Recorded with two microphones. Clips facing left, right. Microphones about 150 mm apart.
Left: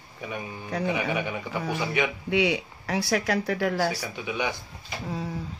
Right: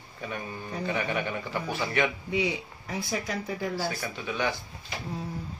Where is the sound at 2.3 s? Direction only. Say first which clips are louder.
Left 5 dB; 85° left.